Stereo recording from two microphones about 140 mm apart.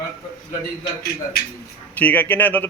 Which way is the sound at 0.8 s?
90° left.